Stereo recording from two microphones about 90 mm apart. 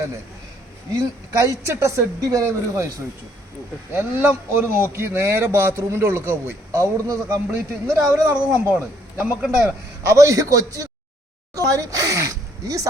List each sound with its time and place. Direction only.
0.9 s a woman's voice: 35° right (ahead or behind)
3.9 s speech: 25° right (ahead or behind)
9.1 s speech: 10° right (ahead or behind)
10.0 s a woman's voice: 35° right (ahead or behind)